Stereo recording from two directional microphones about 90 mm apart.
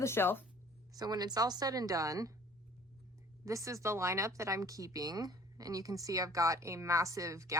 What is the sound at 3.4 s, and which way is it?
Speech, 35° right (ahead or behind).